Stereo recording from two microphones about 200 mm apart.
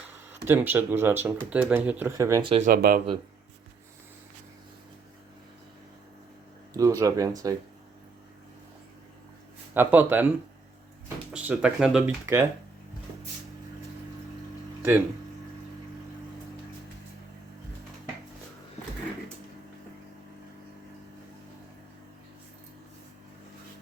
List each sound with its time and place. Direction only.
0.4 s speech: 10° right (ahead or behind)
2.5 s speech: 35° right (ahead or behind)
2.7 s speech: 50° right (ahead or behind)
6.7 s speech: 15° right (ahead or behind)
9.7 s speech: 10° right (ahead or behind)
11.3 s speech: 5° right (ahead or behind)
14.8 s speech: 10° right (ahead or behind)